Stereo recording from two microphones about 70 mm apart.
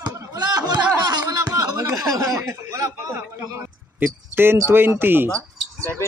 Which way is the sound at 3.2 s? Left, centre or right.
Right.